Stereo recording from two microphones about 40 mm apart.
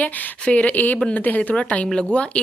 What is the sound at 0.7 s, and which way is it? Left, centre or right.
Speech, left.